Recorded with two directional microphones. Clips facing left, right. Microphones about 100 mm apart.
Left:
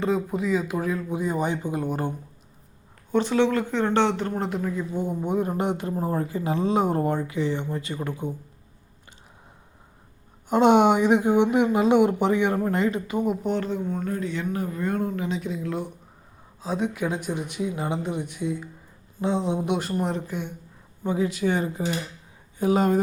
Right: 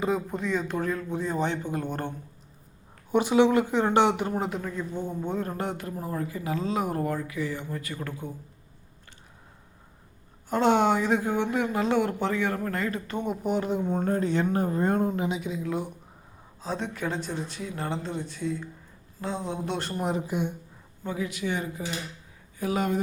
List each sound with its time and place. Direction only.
0.0 s speech: centre (ahead or behind)
3.1 s speech: 15° right (ahead or behind); by 8.4 s 20° left (ahead or behind)
10.5 s speech: 20° left (ahead or behind)
13.1 s speech: 5° left (ahead or behind)
13.7 s speech: 20° right (ahead or behind)
14.0 s speech: 35° right (ahead or behind)
15.3 s speech: centre (ahead or behind); by 19.8 s 15° left (ahead or behind)
20.0 s speech: 5° right (ahead or behind)
21.0 s speech: 20° left (ahead or behind)
21.2 s speech: 35° left (ahead or behind)